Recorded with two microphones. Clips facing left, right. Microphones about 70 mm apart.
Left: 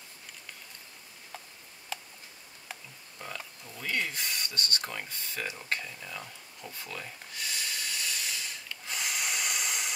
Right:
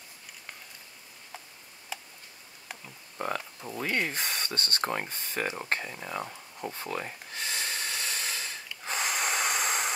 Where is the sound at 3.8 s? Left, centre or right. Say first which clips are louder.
Right 3 dB; right.